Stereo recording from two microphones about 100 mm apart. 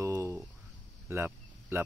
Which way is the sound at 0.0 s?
30° right (ahead or behind).